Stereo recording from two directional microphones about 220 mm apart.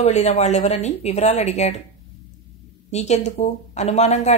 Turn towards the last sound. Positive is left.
turn(degrees=30)  # may be behind; listen again after turning